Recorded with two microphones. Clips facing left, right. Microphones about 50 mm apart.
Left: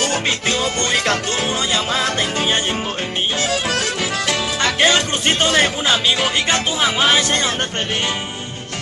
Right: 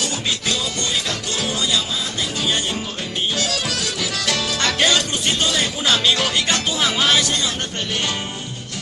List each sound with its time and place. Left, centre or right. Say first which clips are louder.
0.0 s music: left 5 dB; left
1.4 s music: left 2 dB; left
1.9 s music: left 7 dB; left
3.3 s music: left 4 dB; left
4.3 s music: even; left
4.9 s music: left 3 dB; left
5.8 s music: left 1 dB; centre
7.3 s speech: left 4 dB; left